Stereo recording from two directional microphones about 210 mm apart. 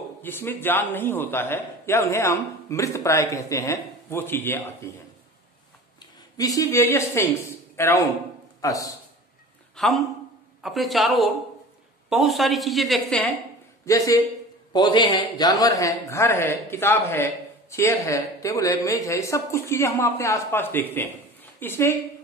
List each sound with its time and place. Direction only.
0.2 s a man's voice: 10° left (ahead or behind)
6.3 s a man's voice: 15° left (ahead or behind)
9.8 s a woman's voice: centre (ahead or behind)
13.8 s a man's voice: 15° left (ahead or behind)